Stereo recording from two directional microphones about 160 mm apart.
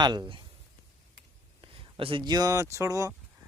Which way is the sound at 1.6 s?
35° right (ahead or behind).